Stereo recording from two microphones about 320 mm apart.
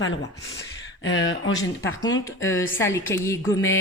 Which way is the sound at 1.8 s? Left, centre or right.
Centre.